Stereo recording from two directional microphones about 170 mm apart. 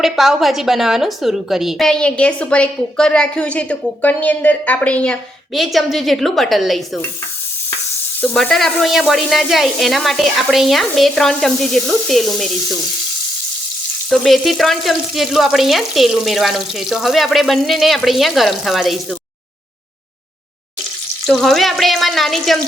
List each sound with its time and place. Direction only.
0.0 s a woman's voice: centre (ahead or behind)
8.2 s a woman's voice: 5° left (ahead or behind)
14.1 s a woman's voice: centre (ahead or behind)
21.2 s a woman's voice: centre (ahead or behind)